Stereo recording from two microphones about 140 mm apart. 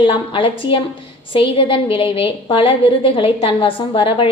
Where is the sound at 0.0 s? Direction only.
35° left (ahead or behind).